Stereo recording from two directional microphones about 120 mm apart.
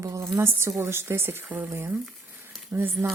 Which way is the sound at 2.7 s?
15° right (ahead or behind).